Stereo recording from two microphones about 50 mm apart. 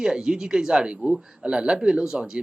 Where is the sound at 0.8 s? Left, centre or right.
Right.